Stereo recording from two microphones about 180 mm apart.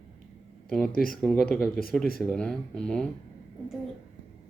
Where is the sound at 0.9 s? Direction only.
55° left (ahead or behind).